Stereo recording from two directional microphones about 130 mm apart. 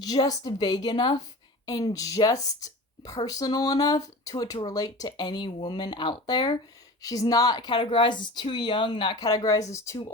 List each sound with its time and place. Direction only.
0.0 s speech: 30° left (ahead or behind)